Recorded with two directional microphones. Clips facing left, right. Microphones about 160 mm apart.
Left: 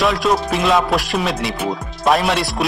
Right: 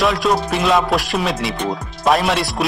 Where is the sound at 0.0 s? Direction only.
Centre (ahead or behind).